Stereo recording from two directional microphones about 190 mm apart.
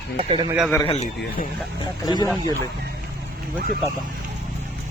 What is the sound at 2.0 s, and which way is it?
Speech, 20° left (ahead or behind).